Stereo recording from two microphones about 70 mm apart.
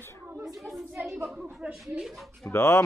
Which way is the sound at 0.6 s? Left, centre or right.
Centre.